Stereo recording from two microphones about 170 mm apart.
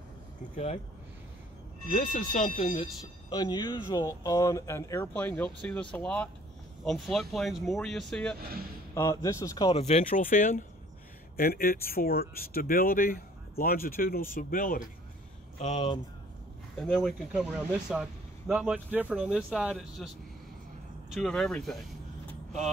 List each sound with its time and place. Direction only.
1.9 s speech: 50° left (ahead or behind)
2.6 s speech: 30° left (ahead or behind); by 8.4 s 5° left (ahead or behind)
8.9 s speech: 15° left (ahead or behind)
9.8 s speech: 40° left (ahead or behind); by 14.8 s 55° left (ahead or behind)
16.7 s speech: centre (ahead or behind)
21.1 s speech: 5° left (ahead or behind)